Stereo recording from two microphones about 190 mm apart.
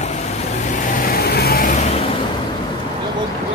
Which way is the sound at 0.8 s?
45° left (ahead or behind).